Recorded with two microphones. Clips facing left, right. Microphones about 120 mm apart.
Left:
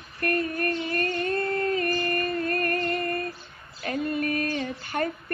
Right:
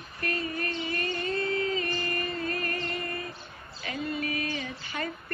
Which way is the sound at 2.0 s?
55° left (ahead or behind).